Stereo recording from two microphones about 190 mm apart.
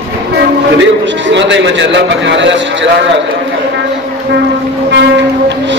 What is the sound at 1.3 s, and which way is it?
Speech, 70° right (ahead or behind).